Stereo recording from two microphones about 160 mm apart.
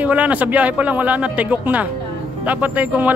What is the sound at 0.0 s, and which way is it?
Speech, 10° right (ahead or behind).